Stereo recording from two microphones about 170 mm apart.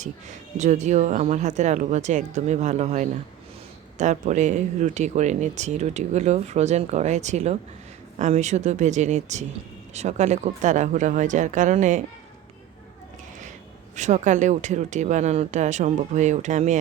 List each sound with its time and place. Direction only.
0.5 s speech: 45° right (ahead or behind)
13.9 s speech: 45° right (ahead or behind)